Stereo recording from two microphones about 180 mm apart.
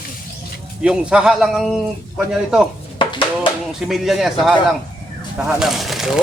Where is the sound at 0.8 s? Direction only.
5° right (ahead or behind).